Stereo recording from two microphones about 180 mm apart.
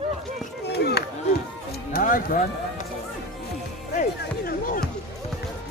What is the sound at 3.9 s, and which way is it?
Music, 50° left (ahead or behind).